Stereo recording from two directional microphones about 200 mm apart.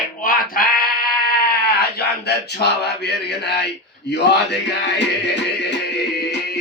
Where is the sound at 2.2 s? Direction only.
55° left (ahead or behind).